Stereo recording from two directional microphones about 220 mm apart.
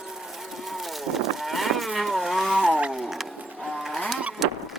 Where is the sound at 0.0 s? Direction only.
Centre (ahead or behind).